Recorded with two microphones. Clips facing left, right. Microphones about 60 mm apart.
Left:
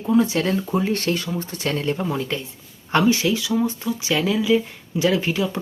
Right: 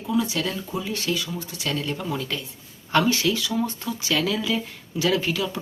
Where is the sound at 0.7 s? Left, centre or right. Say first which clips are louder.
Left 6 dB; left.